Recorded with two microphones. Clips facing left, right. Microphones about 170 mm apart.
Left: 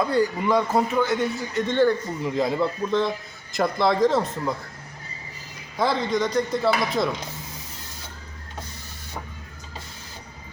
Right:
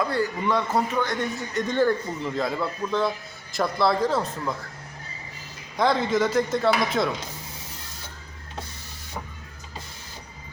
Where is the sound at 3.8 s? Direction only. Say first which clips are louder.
Left 2 dB; 20° left (ahead or behind).